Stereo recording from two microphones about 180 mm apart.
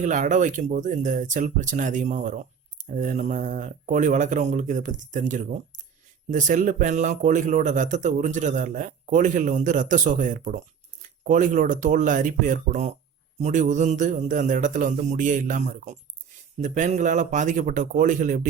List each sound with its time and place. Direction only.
0.0 s speech: 45° right (ahead or behind)